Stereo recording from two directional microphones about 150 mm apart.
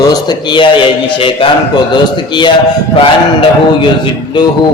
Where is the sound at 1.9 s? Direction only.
30° left (ahead or behind).